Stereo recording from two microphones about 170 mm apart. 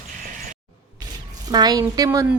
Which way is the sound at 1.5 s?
25° right (ahead or behind).